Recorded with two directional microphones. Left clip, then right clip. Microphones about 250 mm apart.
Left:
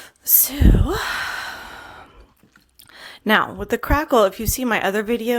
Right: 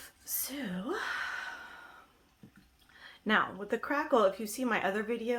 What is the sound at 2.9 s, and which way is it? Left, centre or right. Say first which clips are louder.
Speech: left 12 dB; left.